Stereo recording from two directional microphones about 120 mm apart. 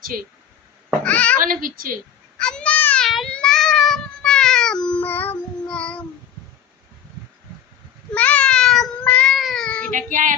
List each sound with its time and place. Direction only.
1.0 s a child's voice: 10° left (ahead or behind)
2.4 s baby cry: 5° left (ahead or behind)
3.1 s cat: 5° left (ahead or behind)
8.1 s a sound: 10° left (ahead or behind)
9.0 s cat: 10° left (ahead or behind)
9.3 s meow: centre (ahead or behind)
9.9 s child singing: 90° right